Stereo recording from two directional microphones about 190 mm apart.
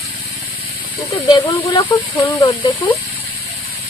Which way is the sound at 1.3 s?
20° left (ahead or behind).